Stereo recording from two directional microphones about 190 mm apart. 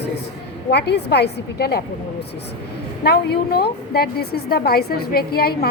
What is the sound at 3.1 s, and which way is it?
A woman's voice, 55° left (ahead or behind).